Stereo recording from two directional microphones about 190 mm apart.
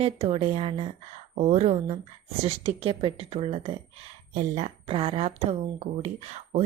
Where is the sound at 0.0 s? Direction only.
35° right (ahead or behind).